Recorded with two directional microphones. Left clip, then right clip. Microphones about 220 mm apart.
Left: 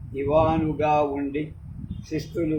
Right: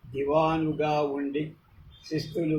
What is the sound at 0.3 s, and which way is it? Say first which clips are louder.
Speech: left 4 dB; 15° left (ahead or behind).